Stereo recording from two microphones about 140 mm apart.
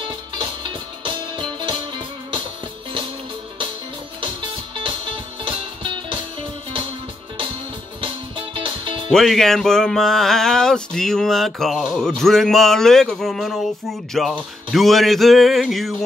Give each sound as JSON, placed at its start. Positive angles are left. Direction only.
{"t": 1.0, "sound": "music", "side_deg": -35}
{"t": 4.2, "sound": "music", "side_deg": -35}
{"t": 8.5, "sound": "music", "side_deg": -35}
{"t": 9.1, "sound": "a sound", "side_deg": 0}